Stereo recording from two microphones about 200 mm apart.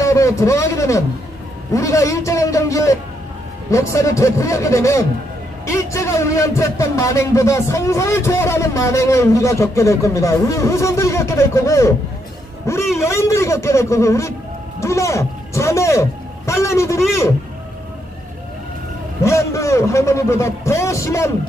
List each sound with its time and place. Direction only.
0.0 s a man's voice: 15° left (ahead or behind)
19.2 s a man's voice: 15° left (ahead or behind)